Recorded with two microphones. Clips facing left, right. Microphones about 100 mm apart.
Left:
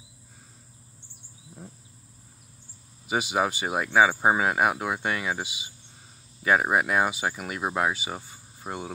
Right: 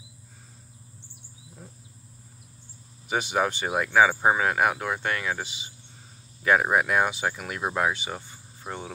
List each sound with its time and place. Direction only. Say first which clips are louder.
3.1 s speech: even; 5° left (ahead or behind)